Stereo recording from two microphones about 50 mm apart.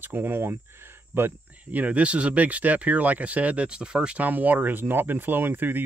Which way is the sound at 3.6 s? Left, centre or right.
Centre.